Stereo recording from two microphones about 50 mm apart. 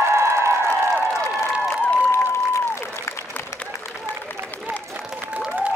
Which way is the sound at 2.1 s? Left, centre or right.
Left.